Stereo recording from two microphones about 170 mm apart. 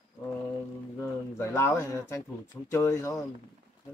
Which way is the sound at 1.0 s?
15° left (ahead or behind).